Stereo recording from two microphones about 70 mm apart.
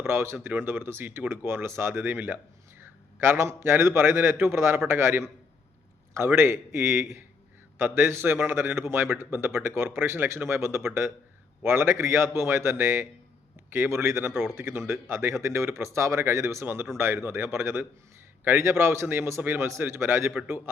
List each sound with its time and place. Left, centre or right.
0.0 s a man's voice: right
7.8 s a man's voice: right